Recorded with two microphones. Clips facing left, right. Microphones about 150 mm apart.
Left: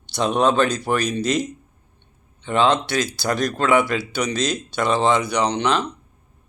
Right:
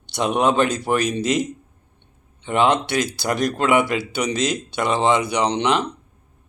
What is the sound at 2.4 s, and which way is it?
A man's voice, 15° right (ahead or behind).